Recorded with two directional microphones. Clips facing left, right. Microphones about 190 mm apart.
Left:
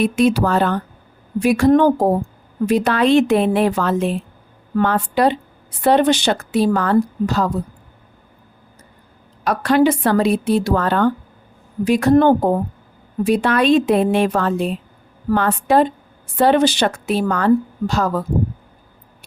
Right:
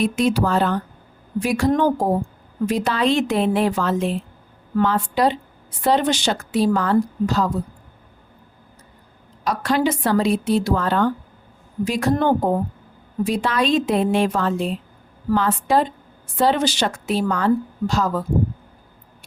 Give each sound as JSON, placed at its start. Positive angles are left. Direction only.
{"t": 0.0, "sound": "speech", "side_deg": 60}
{"t": 9.4, "sound": "speech", "side_deg": 60}